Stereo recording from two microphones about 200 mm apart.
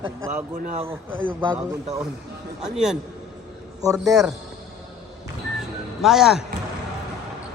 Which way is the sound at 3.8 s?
15° right (ahead or behind).